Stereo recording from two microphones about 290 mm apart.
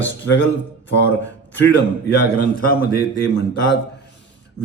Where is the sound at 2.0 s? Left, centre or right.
Left.